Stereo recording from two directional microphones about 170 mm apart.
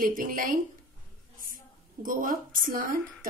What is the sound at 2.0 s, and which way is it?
Speech, 55° right (ahead or behind).